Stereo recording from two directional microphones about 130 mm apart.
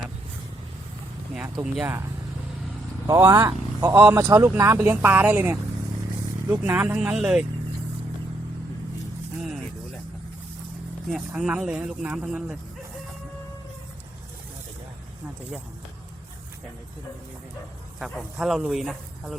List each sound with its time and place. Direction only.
1.6 s speech: 5° right (ahead or behind)
3.1 s speech: 25° right (ahead or behind); by 7.4 s 5° right (ahead or behind)
11.1 s speech: 10° right (ahead or behind)
18.0 s speech: centre (ahead or behind)